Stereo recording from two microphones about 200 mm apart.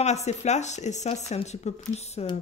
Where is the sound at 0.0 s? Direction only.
35° left (ahead or behind).